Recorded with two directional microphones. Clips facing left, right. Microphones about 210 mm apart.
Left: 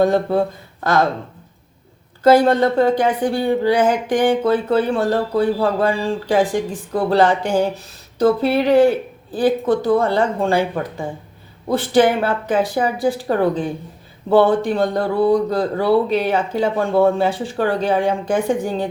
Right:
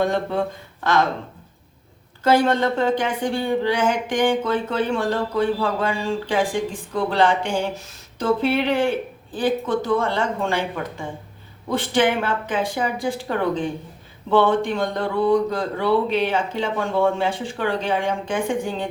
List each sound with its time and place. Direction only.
0.0 s speech: 35° left (ahead or behind)
2.4 s speech: 35° left (ahead or behind)